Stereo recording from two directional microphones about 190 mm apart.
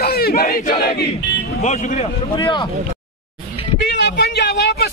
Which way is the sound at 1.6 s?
40° left (ahead or behind).